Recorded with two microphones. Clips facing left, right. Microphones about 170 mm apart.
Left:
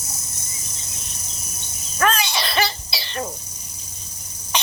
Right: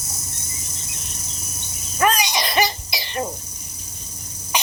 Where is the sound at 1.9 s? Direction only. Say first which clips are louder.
Right 1 dB; 15° right (ahead or behind).